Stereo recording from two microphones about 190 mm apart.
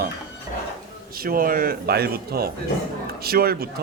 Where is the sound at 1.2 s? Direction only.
50° right (ahead or behind).